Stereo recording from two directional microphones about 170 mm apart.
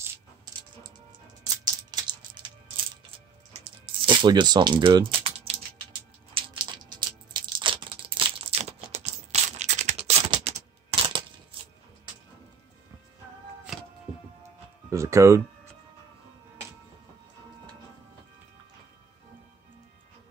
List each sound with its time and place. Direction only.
1.9 s music: 25° right (ahead or behind)
3.6 s music: 30° right (ahead or behind)
6.3 s a sound: 25° right (ahead or behind)
13.7 s music: centre (ahead or behind)
14.9 s music: 15° right (ahead or behind)